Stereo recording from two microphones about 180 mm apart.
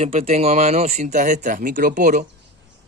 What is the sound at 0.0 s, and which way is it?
Speech, 35° right (ahead or behind).